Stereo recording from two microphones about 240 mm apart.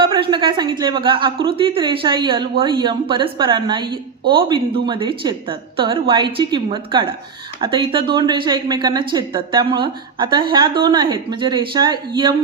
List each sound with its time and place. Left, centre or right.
0.0 s a woman's voice: centre